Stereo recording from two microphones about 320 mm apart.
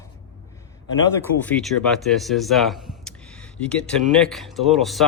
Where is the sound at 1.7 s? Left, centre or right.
Left.